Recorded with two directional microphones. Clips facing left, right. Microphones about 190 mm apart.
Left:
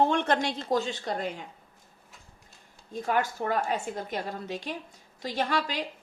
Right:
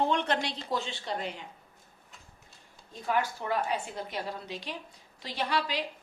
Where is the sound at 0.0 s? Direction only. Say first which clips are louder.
Left 4 dB; 50° left (ahead or behind).